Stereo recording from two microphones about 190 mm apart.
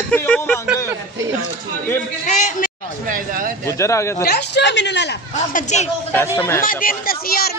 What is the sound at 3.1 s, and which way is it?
Speech, 45° right (ahead or behind).